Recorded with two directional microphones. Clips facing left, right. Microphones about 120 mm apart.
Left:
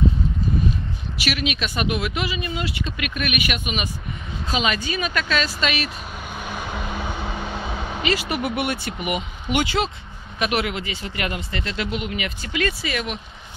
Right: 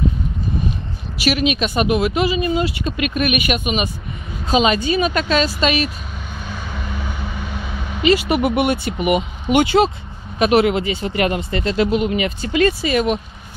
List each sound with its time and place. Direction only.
1.2 s speech: 30° right (ahead or behind)
6.4 s vehicle: 15° left (ahead or behind)
8.0 s speech: 25° right (ahead or behind)
9.8 s speech: 40° right (ahead or behind)
10.4 s speech: 30° right (ahead or behind)